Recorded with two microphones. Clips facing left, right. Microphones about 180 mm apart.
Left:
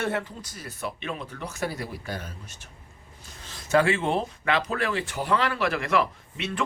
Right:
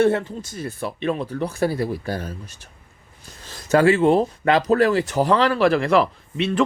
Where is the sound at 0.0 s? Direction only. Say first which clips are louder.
Right 10 dB; 30° right (ahead or behind).